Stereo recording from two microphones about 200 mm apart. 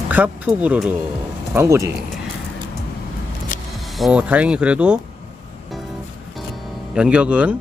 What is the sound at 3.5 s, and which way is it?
Vehicle, 45° left (ahead or behind).